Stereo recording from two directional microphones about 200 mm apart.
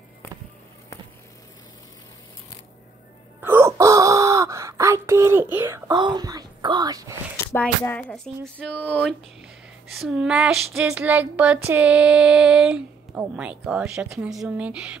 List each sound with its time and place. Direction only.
3.3 s wail: 10° right (ahead or behind)
7.5 s speech: 10° left (ahead or behind)
9.9 s female singing: 5° right (ahead or behind)